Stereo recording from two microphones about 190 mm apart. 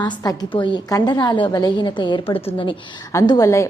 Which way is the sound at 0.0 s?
20° left (ahead or behind).